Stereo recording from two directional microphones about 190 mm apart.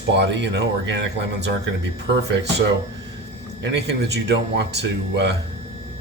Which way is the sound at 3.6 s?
60° right (ahead or behind).